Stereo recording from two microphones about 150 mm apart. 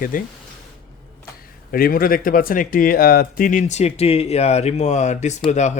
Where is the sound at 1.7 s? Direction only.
75° left (ahead or behind).